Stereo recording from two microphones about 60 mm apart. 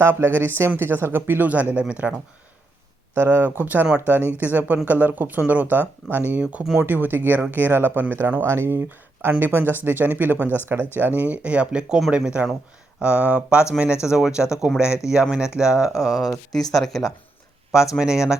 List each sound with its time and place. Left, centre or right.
0.0 s speech: right
1.5 s speech: right
3.2 s speech: right
6.7 s speech: right
8.4 s speech: right; by 17.0 s centre
17.9 s speech: centre